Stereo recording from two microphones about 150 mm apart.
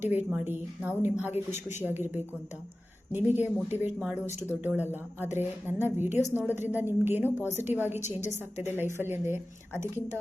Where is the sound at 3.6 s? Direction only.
45° left (ahead or behind).